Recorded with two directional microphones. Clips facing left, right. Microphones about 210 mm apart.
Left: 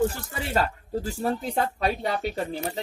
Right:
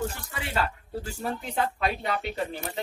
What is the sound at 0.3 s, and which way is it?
Speech, 40° left (ahead or behind).